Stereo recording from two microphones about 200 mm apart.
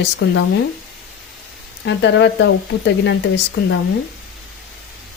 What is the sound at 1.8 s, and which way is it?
Speech, 60° left (ahead or behind).